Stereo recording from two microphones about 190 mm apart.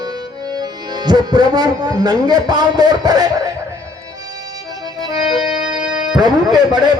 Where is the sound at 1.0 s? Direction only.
20° right (ahead or behind).